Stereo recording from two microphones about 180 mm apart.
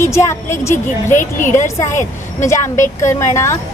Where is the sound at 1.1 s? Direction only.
45° left (ahead or behind).